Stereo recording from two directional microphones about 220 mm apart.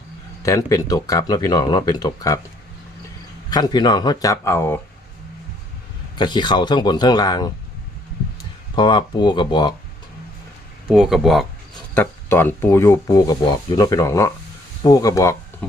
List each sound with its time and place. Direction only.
0.4 s speech: 15° left (ahead or behind)
3.5 s speech: 20° left (ahead or behind)
6.1 s speech: 20° left (ahead or behind)
8.7 s speech: 20° left (ahead or behind)
10.8 s speech: centre (ahead or behind); by 15.4 s 15° left (ahead or behind)